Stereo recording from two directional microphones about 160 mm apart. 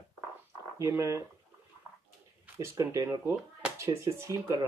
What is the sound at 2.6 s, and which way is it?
Speech, 20° right (ahead or behind).